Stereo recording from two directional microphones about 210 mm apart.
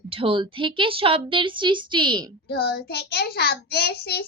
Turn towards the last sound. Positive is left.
turn(degrees=50)  # may be behind; listen again after turning